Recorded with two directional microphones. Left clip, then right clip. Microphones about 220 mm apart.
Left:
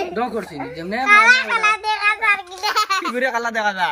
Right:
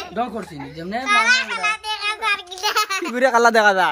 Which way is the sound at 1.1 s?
30° left (ahead or behind).